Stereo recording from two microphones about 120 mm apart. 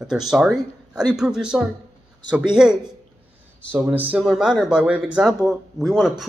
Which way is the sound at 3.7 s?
15° right (ahead or behind).